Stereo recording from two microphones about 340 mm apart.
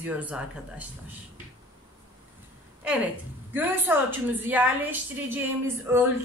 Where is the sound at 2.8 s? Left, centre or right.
Centre.